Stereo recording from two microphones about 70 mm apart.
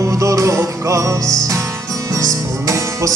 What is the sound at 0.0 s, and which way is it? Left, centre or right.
Music, right.